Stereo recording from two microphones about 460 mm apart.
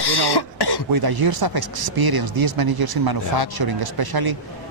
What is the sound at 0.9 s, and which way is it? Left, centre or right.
A man's voice, right.